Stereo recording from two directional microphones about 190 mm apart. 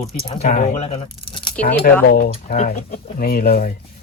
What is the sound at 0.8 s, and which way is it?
Crumpling, 30° left (ahead or behind).